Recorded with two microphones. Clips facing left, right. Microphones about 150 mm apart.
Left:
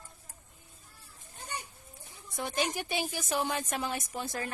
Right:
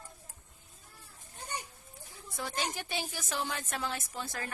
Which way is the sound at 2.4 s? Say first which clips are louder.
Left 4 dB; 15° left (ahead or behind).